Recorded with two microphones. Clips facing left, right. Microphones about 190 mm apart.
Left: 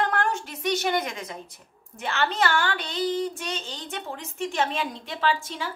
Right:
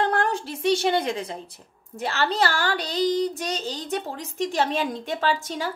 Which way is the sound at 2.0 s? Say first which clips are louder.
Right 2 dB; 35° right (ahead or behind).